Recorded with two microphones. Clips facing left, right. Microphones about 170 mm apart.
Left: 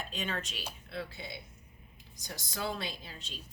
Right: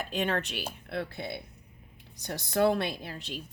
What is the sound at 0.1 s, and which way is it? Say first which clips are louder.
Speech: right 8 dB; 60° right (ahead or behind).